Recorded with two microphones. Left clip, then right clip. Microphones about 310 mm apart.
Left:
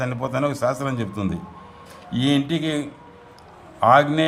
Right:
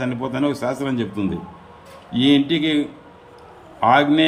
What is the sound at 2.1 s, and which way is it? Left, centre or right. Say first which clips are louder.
Speech: right 5 dB; left.